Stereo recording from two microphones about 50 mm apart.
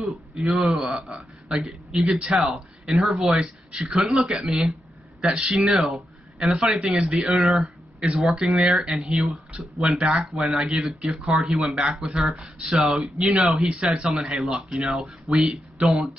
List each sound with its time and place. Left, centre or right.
0.0 s speech: centre
12.4 s speech: right
14.1 s speech: centre